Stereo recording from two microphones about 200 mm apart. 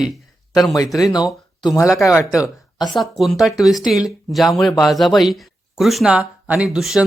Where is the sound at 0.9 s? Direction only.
20° left (ahead or behind).